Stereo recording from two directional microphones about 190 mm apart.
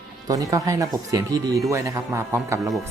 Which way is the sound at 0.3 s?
20° right (ahead or behind).